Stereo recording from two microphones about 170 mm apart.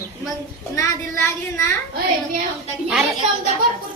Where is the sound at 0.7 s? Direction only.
15° left (ahead or behind).